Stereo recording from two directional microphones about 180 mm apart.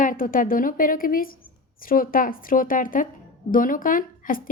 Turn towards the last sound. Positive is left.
turn(degrees=50)  # may be behind; listen again after turning